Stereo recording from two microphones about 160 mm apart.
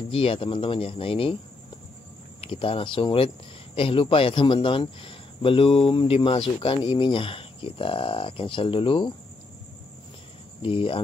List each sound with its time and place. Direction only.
0.1 s speech: 35° left (ahead or behind)
2.4 s speech: 35° left (ahead or behind)
10.6 s speech: 35° left (ahead or behind)